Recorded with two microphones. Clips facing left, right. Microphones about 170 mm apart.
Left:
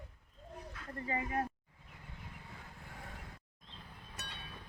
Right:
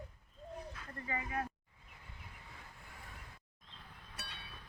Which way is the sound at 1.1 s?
35° left (ahead or behind).